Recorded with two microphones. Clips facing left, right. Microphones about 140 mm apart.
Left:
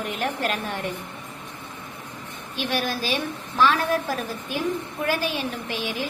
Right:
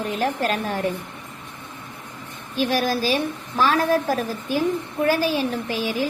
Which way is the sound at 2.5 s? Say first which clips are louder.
Right 5 dB; 40° right (ahead or behind).